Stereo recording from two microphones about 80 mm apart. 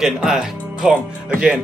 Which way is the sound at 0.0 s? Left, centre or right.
Centre.